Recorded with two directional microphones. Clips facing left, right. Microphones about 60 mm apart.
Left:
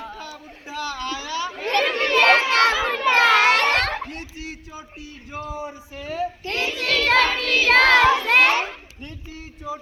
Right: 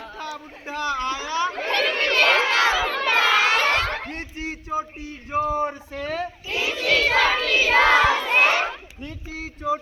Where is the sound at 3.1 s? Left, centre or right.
Left.